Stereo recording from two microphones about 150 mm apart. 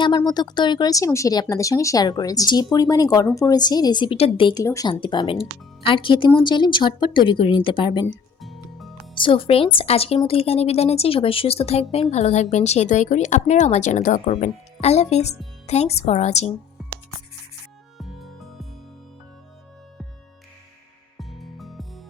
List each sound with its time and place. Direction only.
0.2 s speech: 30° left (ahead or behind)
4.6 s speech: 20° left (ahead or behind)
4.9 s speech: 30° left (ahead or behind)
8.4 s music: centre (ahead or behind)
9.1 s speech: 35° left (ahead or behind)
17.9 s music: centre (ahead or behind)
21.2 s music: centre (ahead or behind)